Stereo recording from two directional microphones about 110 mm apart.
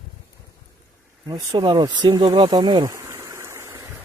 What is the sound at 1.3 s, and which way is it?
Speech, 40° right (ahead or behind).